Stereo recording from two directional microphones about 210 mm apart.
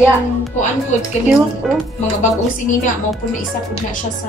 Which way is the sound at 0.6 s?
35° left (ahead or behind).